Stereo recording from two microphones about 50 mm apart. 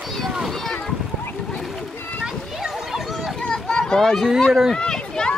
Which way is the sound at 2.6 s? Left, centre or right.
Centre.